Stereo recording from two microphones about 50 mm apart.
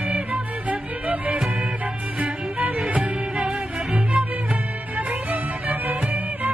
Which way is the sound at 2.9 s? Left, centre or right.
Right.